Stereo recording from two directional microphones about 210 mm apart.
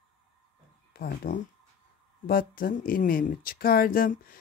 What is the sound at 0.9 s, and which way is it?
Speech, 45° left (ahead or behind).